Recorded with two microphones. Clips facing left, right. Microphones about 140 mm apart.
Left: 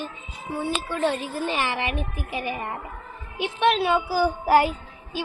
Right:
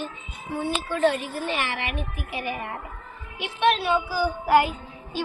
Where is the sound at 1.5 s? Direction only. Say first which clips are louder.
Left 3 dB; 40° left (ahead or behind).